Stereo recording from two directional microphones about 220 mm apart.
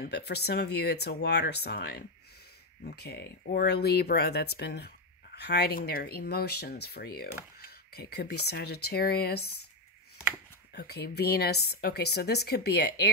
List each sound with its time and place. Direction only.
0.0 s speech: 50° left (ahead or behind)
10.7 s speech: 45° left (ahead or behind)